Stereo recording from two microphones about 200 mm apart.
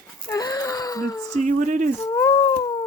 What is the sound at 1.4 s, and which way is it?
Speech, 40° right (ahead or behind).